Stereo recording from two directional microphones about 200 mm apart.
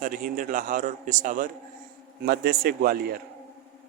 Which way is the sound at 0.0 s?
45° right (ahead or behind).